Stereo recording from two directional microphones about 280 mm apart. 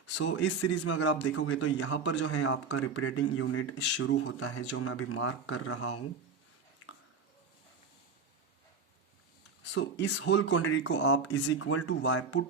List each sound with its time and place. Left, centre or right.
0.1 s a man's voice: left
9.7 s a man's voice: left